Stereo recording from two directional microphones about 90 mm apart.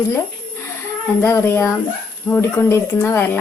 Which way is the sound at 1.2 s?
25° left (ahead or behind).